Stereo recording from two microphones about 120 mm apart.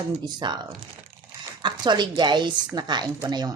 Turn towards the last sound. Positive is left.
turn(degrees=-35)  # may be behind; listen again after turning